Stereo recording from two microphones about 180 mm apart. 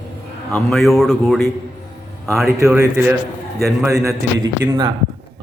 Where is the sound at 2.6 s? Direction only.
15° right (ahead or behind).